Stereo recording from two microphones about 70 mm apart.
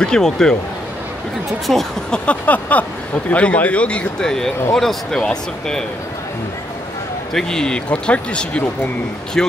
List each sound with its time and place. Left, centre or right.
0.0 s speech: centre
1.7 s speech: centre
2.1 s a sound: left
3.3 s speech: centre
7.3 s speech: centre